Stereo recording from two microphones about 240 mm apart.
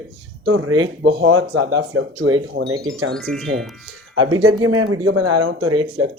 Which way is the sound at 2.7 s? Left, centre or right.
Centre.